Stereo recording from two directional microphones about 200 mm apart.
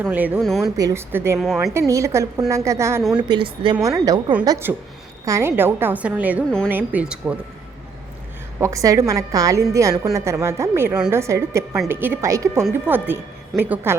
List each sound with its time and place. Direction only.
0.0 s a woman's voice: 10° right (ahead or behind)
0.6 s a woman's voice: 15° right (ahead or behind)
3.0 s a woman's voice: centre (ahead or behind)
3.2 s a woman's voice: 25° right (ahead or behind); by 7.3 s 5° right (ahead or behind)
8.5 s a woman's voice: 15° right (ahead or behind)